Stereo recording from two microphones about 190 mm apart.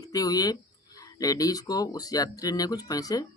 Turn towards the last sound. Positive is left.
turn(degrees=20)  # may be behind; listen again after turning